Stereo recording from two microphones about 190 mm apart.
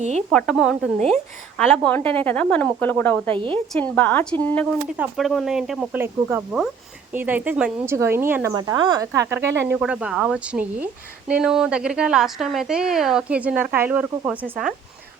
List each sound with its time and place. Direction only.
0.3 s a woman's voice: centre (ahead or behind)
3.3 s speech: 25° right (ahead or behind)
3.7 s a woman's voice: 10° left (ahead or behind)